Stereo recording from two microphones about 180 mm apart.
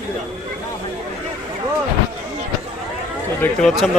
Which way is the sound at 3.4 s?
5° left (ahead or behind).